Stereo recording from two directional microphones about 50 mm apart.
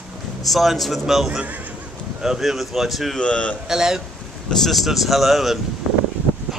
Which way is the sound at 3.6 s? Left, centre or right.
Centre.